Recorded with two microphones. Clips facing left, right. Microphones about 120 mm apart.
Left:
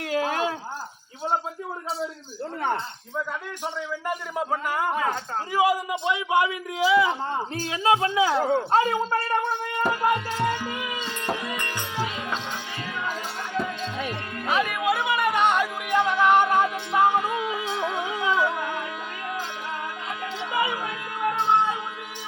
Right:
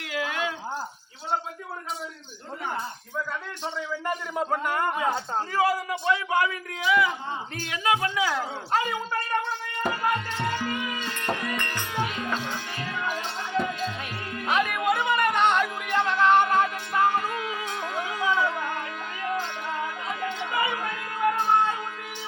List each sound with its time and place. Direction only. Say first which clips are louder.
0.0 s a sound: left 5 dB; 40° left (ahead or behind)
3.6 s a man's voice: even; 10° left (ahead or behind)
4.9 s speech: even; 20° right (ahead or behind)
5.5 s a man's voice: left 3 dB; 15° left (ahead or behind)
6.7 s a man's voice: left 4 dB; 30° left (ahead or behind)
9.9 s music: left 2 dB; 10° left (ahead or behind)
14.3 s music: even; centre (ahead or behind)
20.5 s a sound: left 3 dB; 10° left (ahead or behind)